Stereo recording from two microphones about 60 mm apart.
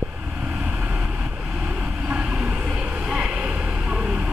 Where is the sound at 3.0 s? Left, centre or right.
Centre.